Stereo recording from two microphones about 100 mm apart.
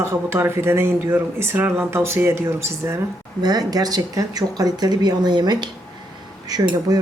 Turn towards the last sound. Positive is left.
turn(degrees=-45)  # may be behind; listen again after turning